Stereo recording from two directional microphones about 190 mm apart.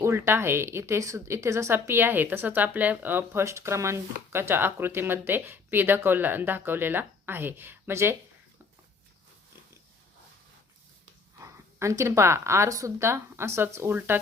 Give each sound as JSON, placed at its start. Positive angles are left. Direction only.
{"t": 0.0, "sound": "speech", "side_deg": -15}
{"t": 11.8, "sound": "speech", "side_deg": -15}